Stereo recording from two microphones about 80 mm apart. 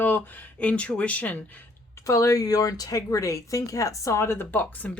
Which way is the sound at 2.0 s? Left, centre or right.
Left.